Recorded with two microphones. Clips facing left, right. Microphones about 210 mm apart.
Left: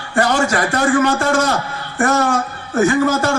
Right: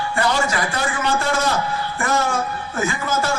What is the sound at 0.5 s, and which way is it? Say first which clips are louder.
A man's voice: left 8 dB; 50° left (ahead or behind).